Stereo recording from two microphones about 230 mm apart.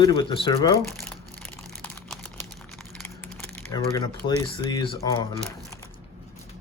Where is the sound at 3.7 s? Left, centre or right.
Centre.